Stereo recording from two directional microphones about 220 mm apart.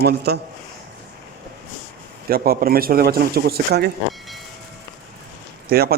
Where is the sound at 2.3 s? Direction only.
40° right (ahead or behind).